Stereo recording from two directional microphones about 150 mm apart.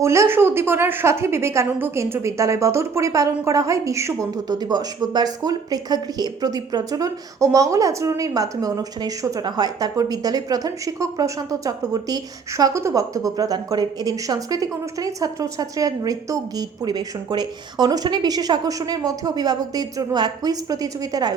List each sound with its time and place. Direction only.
0.0 s a woman's voice: 20° right (ahead or behind)